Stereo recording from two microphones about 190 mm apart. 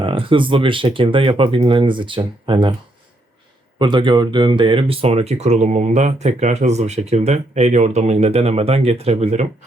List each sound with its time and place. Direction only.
0.0 s speech: 25° right (ahead or behind)
3.8 s speech: 25° right (ahead or behind)